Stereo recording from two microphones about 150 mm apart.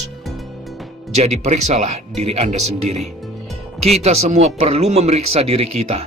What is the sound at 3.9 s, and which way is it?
Speech, 45° right (ahead or behind).